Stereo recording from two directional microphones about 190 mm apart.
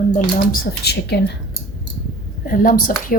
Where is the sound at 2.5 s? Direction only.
50° left (ahead or behind).